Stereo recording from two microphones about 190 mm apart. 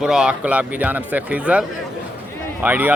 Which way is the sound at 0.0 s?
5° right (ahead or behind).